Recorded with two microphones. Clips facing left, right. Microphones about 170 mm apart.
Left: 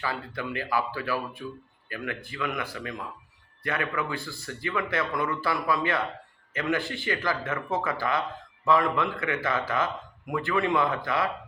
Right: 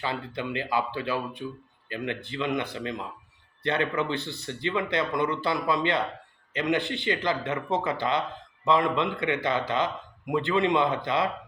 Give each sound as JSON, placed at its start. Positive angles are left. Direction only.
{"t": 0.0, "sound": "speech", "side_deg": -25}